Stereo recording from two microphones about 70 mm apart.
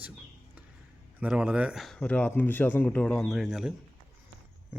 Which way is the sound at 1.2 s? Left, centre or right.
Centre.